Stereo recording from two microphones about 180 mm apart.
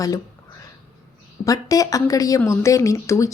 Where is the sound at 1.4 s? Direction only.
20° left (ahead or behind).